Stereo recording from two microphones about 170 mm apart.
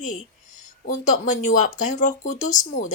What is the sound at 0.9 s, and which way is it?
A woman's voice, 45° left (ahead or behind).